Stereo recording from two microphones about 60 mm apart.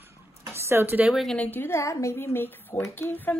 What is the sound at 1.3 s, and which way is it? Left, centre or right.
Speech, left.